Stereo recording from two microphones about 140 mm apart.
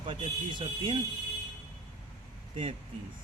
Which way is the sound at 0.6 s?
35° right (ahead or behind).